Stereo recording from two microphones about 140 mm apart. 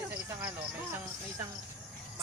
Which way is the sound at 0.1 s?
15° right (ahead or behind).